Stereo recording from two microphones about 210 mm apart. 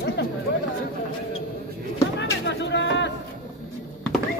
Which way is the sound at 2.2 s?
60° left (ahead or behind).